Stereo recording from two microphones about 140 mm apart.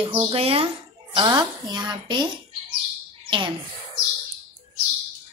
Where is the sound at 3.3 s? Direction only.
35° right (ahead or behind).